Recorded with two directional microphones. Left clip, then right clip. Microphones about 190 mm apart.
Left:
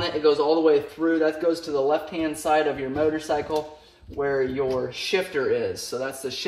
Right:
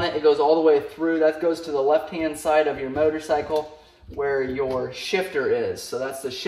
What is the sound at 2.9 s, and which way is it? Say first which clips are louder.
Speech: right 3 dB; centre (ahead or behind).